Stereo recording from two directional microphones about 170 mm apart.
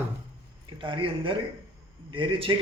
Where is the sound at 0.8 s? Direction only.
30° right (ahead or behind).